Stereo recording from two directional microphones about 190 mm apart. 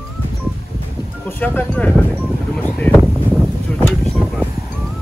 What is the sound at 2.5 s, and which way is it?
Vehicle, 5° left (ahead or behind).